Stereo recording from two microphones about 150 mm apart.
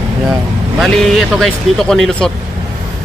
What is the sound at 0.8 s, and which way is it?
Speech, centre (ahead or behind).